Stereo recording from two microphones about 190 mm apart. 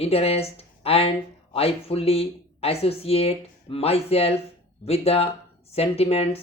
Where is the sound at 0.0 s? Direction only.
30° left (ahead or behind).